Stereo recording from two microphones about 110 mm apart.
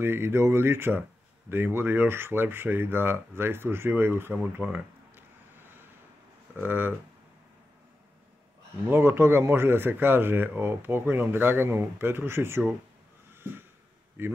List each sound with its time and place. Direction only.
0.0 s speech: 20° right (ahead or behind)
8.9 s speech: 20° right (ahead or behind)
14.2 s speech: 20° right (ahead or behind)